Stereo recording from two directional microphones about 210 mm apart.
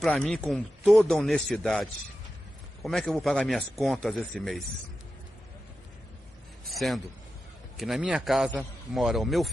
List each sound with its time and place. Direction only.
0.0 s a man's voice: centre (ahead or behind)
6.7 s a man's voice: centre (ahead or behind)